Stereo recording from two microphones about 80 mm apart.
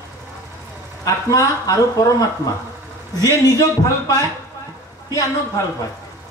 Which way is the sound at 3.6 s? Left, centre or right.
Left.